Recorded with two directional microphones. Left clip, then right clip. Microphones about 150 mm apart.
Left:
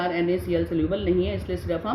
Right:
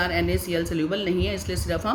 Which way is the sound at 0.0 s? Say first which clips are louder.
Even; 45° right (ahead or behind).